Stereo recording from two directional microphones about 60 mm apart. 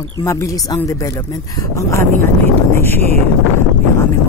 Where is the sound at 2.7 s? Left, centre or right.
Left.